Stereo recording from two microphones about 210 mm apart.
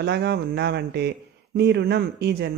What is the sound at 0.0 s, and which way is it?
Speech, 50° right (ahead or behind).